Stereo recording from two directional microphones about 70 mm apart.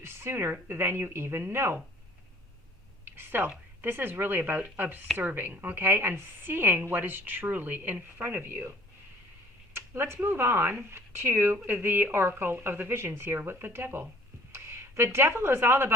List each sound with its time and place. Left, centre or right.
0.0 s speech: right
3.0 s a sound: right
3.8 s a woman's voice: right
9.7 s a woman's voice: right